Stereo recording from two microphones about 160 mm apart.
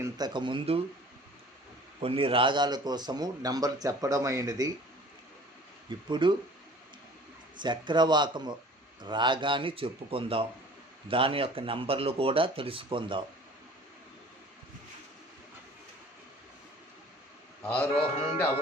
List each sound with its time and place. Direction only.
0.0 s a man's voice: 25° right (ahead or behind)
2.0 s a man's voice: 35° right (ahead or behind)
6.1 s a man's voice: 30° right (ahead or behind)
7.6 s a man's voice: 30° right (ahead or behind)
17.6 s music: 10° left (ahead or behind)